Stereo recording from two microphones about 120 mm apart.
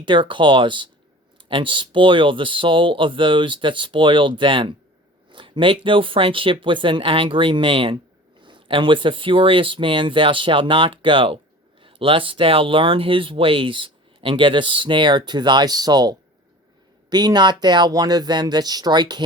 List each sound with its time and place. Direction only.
0.0 s speech: 45° right (ahead or behind)